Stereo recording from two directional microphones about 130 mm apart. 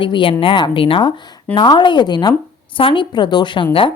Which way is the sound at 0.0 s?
40° left (ahead or behind).